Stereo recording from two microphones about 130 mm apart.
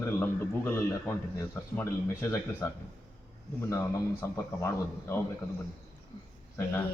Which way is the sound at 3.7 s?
20° left (ahead or behind).